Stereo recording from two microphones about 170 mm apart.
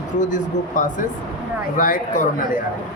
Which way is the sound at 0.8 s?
50° left (ahead or behind).